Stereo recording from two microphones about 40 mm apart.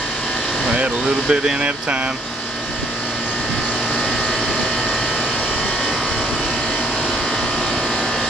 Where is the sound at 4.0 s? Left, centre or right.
Left.